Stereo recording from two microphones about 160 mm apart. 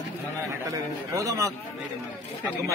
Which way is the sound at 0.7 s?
20° right (ahead or behind).